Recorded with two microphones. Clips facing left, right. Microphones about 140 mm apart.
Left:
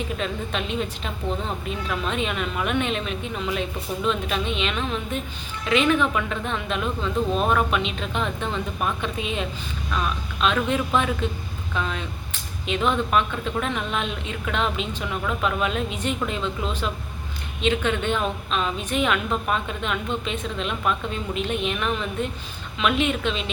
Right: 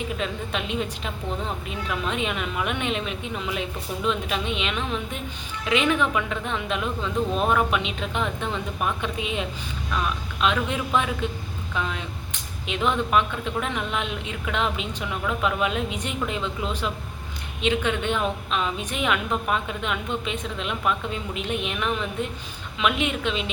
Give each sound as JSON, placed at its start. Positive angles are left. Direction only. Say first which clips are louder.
{"t": 0.2, "sound": "a woman's voice", "louder": "left 1 dB", "side_deg": -15}